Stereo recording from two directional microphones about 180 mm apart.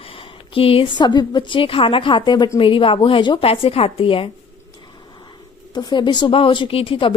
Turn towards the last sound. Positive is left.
turn(degrees=30)  # may be behind; listen again after turning